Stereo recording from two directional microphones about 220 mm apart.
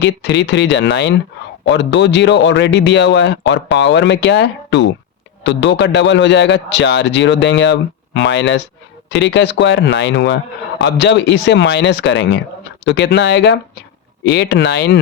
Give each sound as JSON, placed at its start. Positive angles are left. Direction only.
{"t": 0.0, "sound": "speech", "side_deg": 50}